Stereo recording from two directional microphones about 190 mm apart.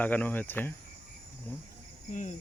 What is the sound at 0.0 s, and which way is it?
Cricket, 10° left (ahead or behind).